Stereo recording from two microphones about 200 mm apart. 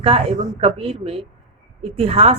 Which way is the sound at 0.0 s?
30° right (ahead or behind).